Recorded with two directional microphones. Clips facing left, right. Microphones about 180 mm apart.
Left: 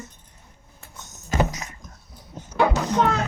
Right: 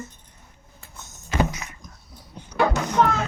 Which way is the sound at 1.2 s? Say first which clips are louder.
Even; 40° left (ahead or behind).